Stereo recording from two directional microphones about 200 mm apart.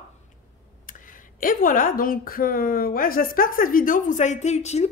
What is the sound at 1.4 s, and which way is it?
A woman's voice, 45° left (ahead or behind).